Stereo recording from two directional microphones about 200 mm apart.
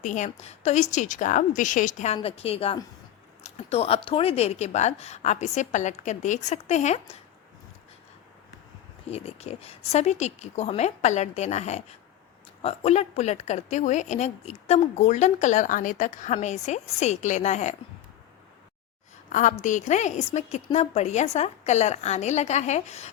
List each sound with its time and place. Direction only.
0.0 s a woman's voice: 40° left (ahead or behind)
9.0 s speech: 30° left (ahead or behind)
19.3 s speech: 40° left (ahead or behind)